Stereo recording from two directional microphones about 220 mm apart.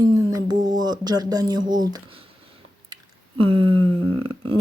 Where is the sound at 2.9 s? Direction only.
25° right (ahead or behind).